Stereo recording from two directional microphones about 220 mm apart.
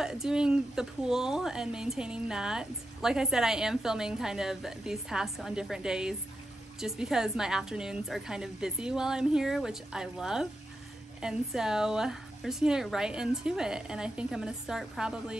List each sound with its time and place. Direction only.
0.0 s speech: 5° right (ahead or behind)